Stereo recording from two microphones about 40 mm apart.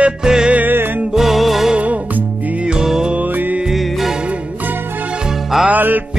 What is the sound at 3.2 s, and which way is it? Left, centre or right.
Mantra, right.